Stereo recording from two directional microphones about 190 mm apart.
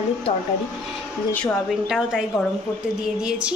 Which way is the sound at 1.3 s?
Centre (ahead or behind).